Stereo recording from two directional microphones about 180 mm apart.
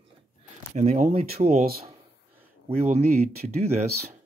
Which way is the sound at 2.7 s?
35° right (ahead or behind).